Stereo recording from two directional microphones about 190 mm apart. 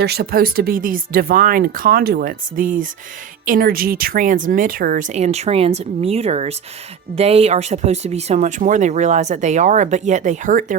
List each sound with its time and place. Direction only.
0.0 s speech: 55° right (ahead or behind)